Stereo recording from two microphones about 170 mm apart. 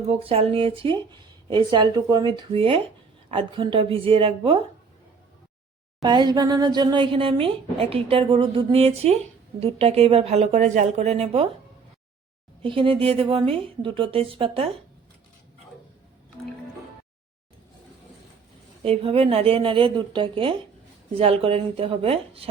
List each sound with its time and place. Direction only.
0.1 s speech: 35° right (ahead or behind)
6.0 s speech: 25° right (ahead or behind)
12.6 s speech: 30° right (ahead or behind)
18.8 s speech: 35° right (ahead or behind)